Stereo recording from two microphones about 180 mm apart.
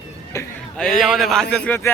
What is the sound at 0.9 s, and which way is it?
Speech, centre (ahead or behind).